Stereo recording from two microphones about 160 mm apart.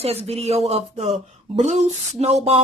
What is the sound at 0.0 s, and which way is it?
Speech, 40° right (ahead or behind).